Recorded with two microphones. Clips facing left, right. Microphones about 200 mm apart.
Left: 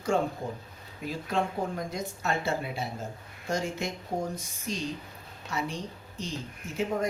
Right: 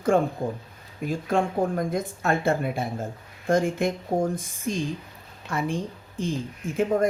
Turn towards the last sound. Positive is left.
turn(degrees=-50)  # may be behind; listen again after turning